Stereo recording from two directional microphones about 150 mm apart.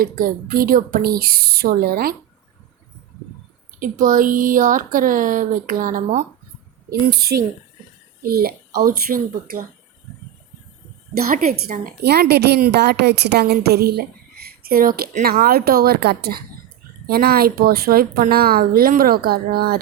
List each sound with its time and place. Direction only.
0.0 s speech: 70° right (ahead or behind); by 2.1 s 85° right
3.8 s speech: 60° right (ahead or behind)
7.0 s a woman's voice: 90° right
11.2 s a woman's voice: 70° right (ahead or behind); by 19.8 s 90° right